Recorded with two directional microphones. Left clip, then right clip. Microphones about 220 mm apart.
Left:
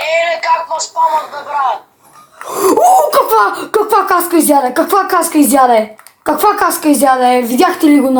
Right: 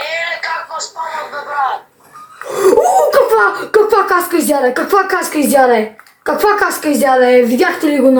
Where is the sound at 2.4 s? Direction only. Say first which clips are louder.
Left 1 dB; 30° left (ahead or behind).